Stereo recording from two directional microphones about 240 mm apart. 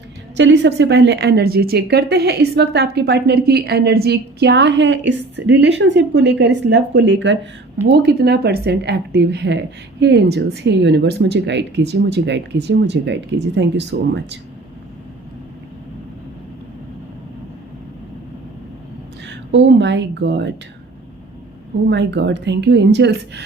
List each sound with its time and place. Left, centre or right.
0.3 s a woman's voice: right
19.5 s a woman's voice: right
21.8 s a woman's voice: right